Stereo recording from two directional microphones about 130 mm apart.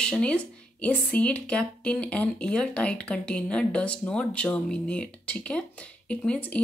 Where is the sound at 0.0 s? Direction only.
5° left (ahead or behind).